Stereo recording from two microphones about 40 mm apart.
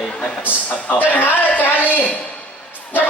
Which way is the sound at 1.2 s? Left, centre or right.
Left.